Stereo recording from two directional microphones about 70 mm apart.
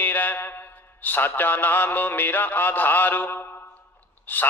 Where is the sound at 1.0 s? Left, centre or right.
Left.